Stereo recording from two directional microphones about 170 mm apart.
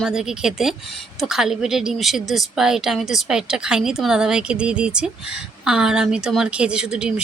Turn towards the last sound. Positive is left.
turn(degrees=-5)  # may be behind; listen again after turning